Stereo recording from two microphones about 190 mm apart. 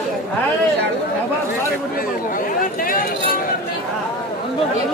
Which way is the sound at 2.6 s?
50° left (ahead or behind).